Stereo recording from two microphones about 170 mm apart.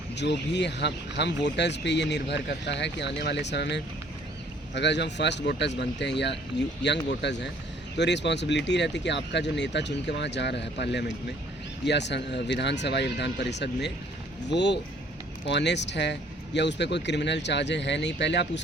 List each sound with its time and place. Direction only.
0.2 s speech: 90° left